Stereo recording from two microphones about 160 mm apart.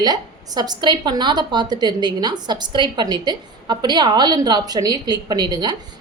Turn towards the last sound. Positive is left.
turn(degrees=-25)  # may be behind; listen again after turning